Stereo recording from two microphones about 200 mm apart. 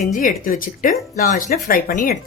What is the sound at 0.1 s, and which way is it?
Speech, 40° left (ahead or behind).